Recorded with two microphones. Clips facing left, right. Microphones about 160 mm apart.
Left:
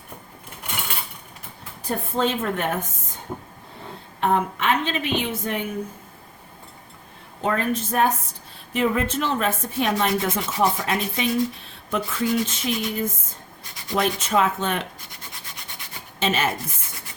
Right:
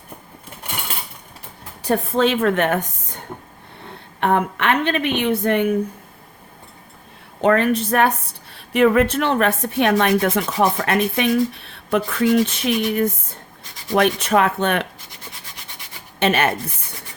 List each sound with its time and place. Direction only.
1.8 s a woman's voice: 80° right; by 5.7 s 65° right (ahead or behind)
7.4 s a woman's voice: 70° right (ahead or behind)
16.2 s a woman's voice: 60° right (ahead or behind)